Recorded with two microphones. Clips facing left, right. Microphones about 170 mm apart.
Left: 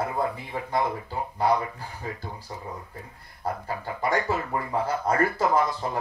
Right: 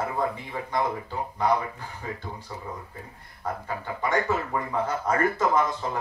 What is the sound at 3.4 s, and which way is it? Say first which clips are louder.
Speech: left 1 dB; 35° left (ahead or behind).